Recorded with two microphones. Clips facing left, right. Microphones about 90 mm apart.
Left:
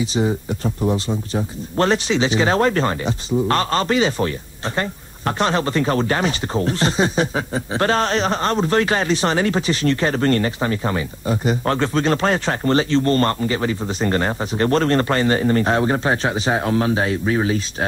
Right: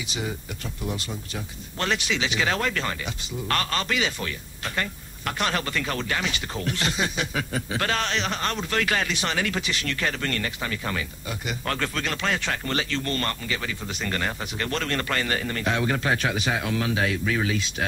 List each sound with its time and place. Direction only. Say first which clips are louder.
0.0 s speech: left 12 dB; 35° left (ahead or behind)